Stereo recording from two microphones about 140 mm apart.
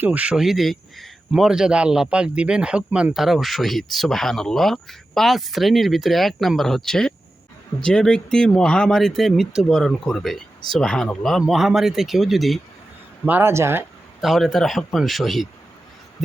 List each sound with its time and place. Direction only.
0.0 s a man's voice: 10° right (ahead or behind)
13.2 s speech: 15° right (ahead or behind)
14.2 s a man's voice: centre (ahead or behind)